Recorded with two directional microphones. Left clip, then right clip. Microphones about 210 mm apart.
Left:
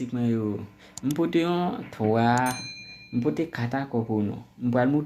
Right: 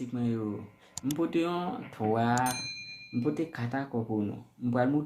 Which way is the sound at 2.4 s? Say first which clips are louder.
Left 4 dB; centre (ahead or behind).